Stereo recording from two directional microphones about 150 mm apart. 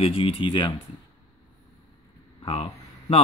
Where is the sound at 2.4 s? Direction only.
40° left (ahead or behind).